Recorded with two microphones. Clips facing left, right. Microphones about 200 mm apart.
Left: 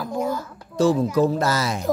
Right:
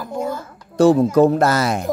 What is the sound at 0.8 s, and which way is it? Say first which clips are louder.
Speech: right 6 dB; 65° right (ahead or behind).